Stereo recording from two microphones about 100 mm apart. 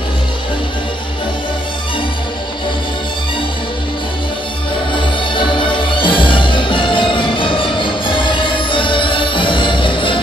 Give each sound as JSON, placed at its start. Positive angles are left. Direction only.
{"t": 4.9, "sound": "music", "side_deg": 55}